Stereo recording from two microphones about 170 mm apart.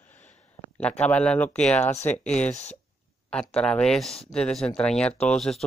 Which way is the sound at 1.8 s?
40° left (ahead or behind).